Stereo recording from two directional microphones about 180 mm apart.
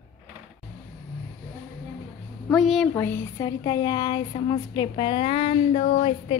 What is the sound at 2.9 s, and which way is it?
Speech, 10° left (ahead or behind).